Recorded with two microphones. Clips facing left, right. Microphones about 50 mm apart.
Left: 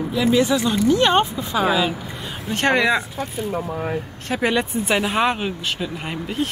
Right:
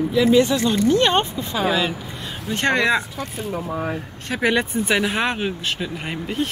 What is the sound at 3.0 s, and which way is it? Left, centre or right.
Speech, centre.